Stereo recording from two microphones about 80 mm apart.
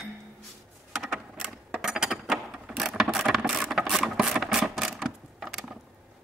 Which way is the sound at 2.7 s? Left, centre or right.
Centre.